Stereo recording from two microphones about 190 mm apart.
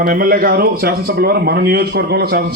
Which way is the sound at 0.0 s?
50° right (ahead or behind).